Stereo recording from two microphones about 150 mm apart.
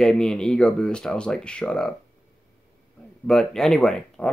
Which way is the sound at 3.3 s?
5° left (ahead or behind).